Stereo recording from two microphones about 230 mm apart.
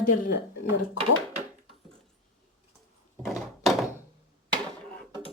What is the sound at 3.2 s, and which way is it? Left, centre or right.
Door, centre.